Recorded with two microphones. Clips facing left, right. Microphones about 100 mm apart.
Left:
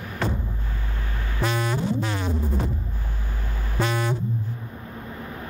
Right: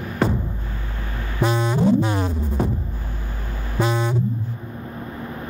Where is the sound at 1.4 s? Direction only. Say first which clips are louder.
Right 5 dB; 20° right (ahead or behind).